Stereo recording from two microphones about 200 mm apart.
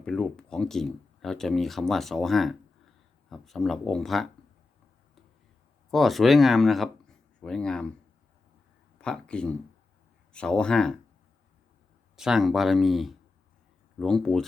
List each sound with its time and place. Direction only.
0.0 s speech: 5° left (ahead or behind)
5.9 s speech: centre (ahead or behind)
9.0 s speech: 5° left (ahead or behind)
12.1 s speech: centre (ahead or behind)